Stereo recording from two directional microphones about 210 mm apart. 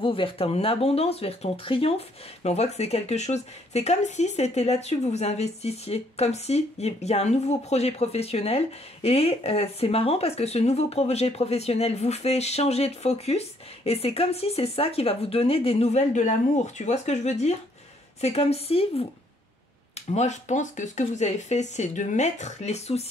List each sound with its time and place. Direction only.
0.0 s speech: 25° left (ahead or behind)
20.1 s speech: 35° left (ahead or behind)